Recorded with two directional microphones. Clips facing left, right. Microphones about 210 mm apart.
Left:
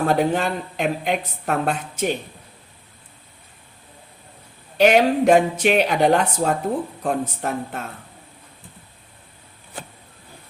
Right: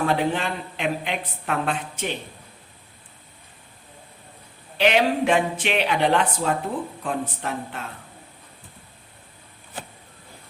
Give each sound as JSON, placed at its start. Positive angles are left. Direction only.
{"t": 0.0, "sound": "a woman's voice", "side_deg": 45}
{"t": 4.8, "sound": "a woman's voice", "side_deg": 45}